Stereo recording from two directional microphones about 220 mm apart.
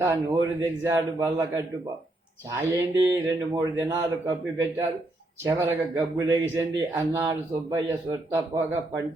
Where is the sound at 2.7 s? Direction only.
15° right (ahead or behind).